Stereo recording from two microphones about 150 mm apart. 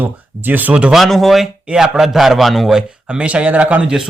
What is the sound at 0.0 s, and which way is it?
Speech, 10° right (ahead or behind).